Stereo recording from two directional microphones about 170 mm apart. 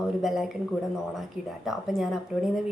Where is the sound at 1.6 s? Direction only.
Centre (ahead or behind).